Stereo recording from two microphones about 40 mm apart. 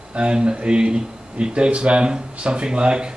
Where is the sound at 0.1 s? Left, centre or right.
Right.